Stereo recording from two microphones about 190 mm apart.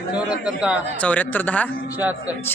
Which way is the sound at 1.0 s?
10° left (ahead or behind).